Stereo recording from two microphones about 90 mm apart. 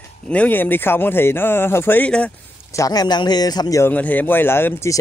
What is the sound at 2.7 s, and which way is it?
Speech, 40° left (ahead or behind).